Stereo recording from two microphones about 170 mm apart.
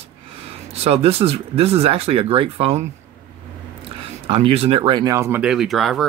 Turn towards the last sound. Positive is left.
turn(degrees=0)  # may be behind; listen again after turning